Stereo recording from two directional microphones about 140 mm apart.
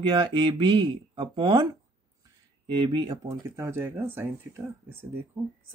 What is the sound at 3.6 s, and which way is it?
Speech, 15° right (ahead or behind).